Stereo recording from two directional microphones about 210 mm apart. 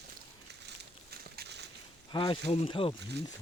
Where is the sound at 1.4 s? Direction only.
55° right (ahead or behind).